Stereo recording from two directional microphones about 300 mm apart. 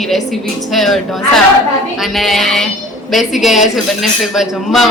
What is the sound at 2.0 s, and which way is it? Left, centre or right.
A man's voice, centre.